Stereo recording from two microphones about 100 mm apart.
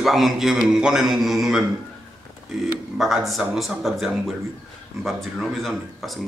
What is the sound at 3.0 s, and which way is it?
Speech, centre (ahead or behind).